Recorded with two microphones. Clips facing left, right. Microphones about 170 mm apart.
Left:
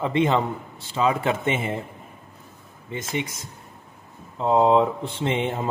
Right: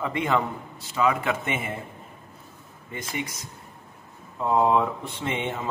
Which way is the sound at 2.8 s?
25° left (ahead or behind).